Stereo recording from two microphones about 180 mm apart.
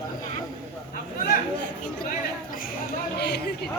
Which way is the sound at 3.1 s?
70° left (ahead or behind).